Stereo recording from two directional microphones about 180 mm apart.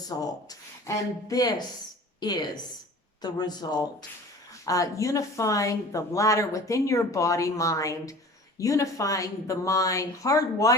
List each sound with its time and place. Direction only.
0.1 s speech: 25° left (ahead or behind)